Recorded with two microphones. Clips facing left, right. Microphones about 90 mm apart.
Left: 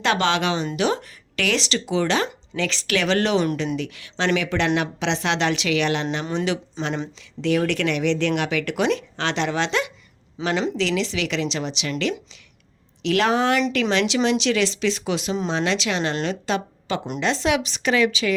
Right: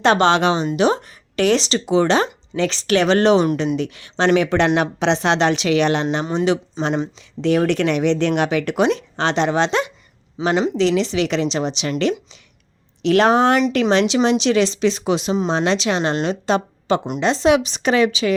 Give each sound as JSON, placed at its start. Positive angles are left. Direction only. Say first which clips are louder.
{"t": 0.0, "sound": "speech", "louder": "right 6 dB", "side_deg": -35}
{"t": 6.8, "sound": "speech", "louder": "right 5 dB", "side_deg": -10}
{"t": 7.2, "sound": "speech", "louder": "right 2 dB", "side_deg": -35}
{"t": 10.4, "sound": "speech", "louder": "right 5 dB", "side_deg": -10}
{"t": 10.8, "sound": "speech", "louder": "right 6 dB", "side_deg": -35}
{"t": 13.9, "sound": "speech", "louder": "right 4 dB", "side_deg": -30}